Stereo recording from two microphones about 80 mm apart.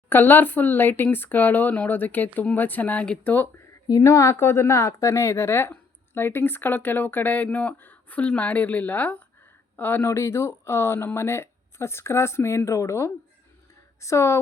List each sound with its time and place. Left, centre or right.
0.1 s speech: left
3.8 s speech: left